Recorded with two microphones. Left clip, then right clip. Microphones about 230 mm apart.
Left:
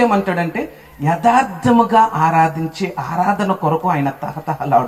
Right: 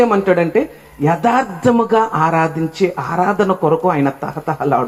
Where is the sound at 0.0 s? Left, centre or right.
Left.